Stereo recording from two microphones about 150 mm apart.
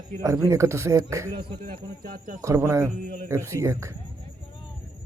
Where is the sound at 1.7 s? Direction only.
70° right (ahead or behind).